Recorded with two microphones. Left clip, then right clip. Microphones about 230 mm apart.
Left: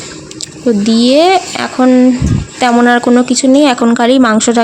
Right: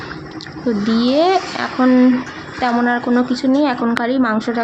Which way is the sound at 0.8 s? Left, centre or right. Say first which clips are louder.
Left 6 dB; left.